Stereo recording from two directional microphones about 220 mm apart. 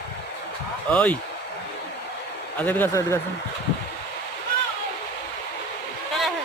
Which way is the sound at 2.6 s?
10° left (ahead or behind).